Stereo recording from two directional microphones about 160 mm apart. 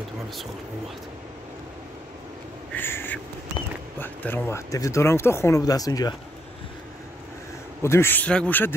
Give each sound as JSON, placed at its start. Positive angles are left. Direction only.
{"t": 2.7, "sound": "crow", "side_deg": 15}
{"t": 4.0, "sound": "speech", "side_deg": 10}
{"t": 7.8, "sound": "speech", "side_deg": 15}